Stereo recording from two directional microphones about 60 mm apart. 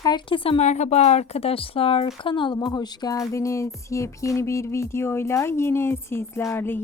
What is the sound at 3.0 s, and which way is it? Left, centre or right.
Music, left.